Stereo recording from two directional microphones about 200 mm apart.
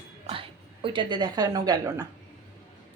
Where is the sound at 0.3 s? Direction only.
25° right (ahead or behind).